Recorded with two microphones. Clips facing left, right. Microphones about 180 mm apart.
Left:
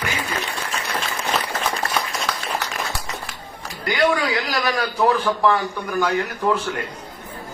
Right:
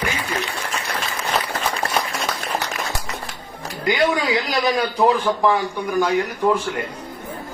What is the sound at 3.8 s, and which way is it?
A woman's voice, 20° right (ahead or behind).